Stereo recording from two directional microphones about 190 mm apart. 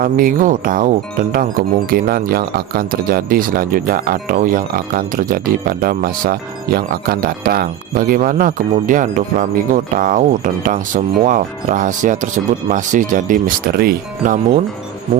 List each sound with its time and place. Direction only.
0.0 s speech: 45° right (ahead or behind)